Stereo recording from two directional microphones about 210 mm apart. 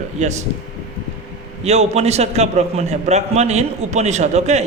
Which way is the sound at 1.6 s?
30° right (ahead or behind).